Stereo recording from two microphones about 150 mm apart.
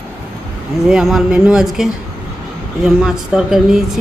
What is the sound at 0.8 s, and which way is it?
Speech, centre (ahead or behind).